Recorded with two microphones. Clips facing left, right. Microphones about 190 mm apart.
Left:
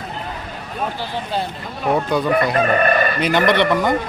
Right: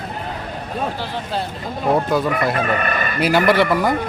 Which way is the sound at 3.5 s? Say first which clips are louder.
Even; 5° right (ahead or behind).